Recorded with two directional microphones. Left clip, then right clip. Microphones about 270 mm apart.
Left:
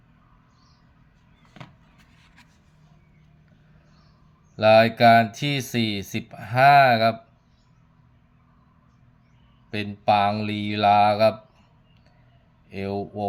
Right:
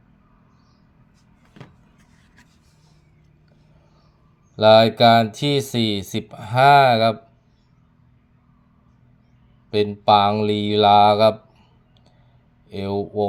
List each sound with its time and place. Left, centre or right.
4.5 s speech: centre
9.7 s speech: centre
12.6 s speech: centre